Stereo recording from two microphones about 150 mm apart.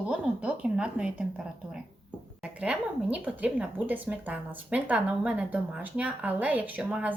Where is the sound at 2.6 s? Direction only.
10° right (ahead or behind).